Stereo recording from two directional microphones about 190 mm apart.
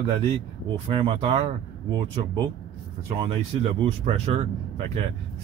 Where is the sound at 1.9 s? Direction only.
20° right (ahead or behind).